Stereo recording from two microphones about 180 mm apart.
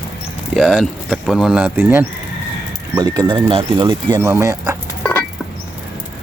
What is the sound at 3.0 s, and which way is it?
Speech, 25° right (ahead or behind).